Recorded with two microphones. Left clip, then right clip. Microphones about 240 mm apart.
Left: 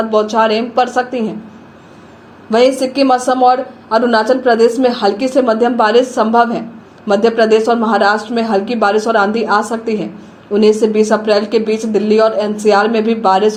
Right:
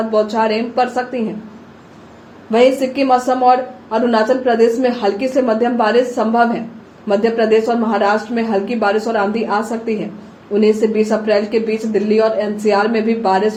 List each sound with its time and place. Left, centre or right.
0.1 s a woman's voice: left
2.5 s a woman's voice: left